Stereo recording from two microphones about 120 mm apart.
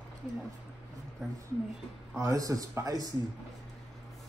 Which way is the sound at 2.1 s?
25° right (ahead or behind).